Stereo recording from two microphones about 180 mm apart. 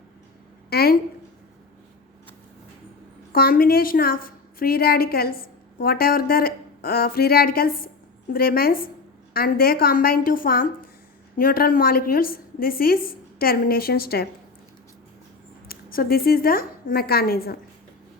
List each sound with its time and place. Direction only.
0.7 s a sound: 60° left (ahead or behind)
3.3 s a woman's voice: 55° left (ahead or behind)
15.6 s a woman's voice: 55° left (ahead or behind)